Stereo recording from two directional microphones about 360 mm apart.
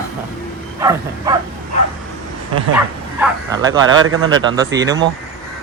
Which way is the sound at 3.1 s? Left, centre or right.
Centre.